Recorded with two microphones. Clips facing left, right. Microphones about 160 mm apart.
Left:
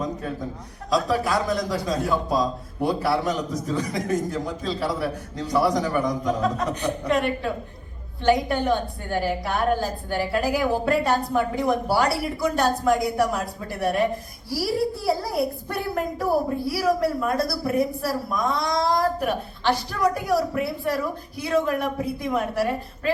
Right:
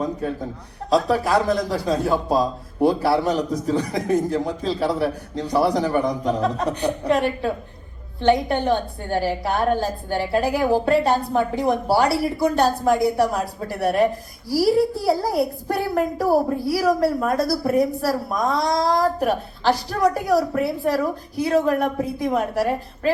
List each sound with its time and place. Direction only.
0.9 s a child's voice: 30° right (ahead or behind)